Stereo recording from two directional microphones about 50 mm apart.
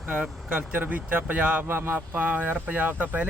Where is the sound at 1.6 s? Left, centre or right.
Right.